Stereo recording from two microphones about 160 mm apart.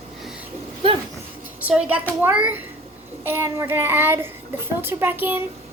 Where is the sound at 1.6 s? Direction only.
5° right (ahead or behind).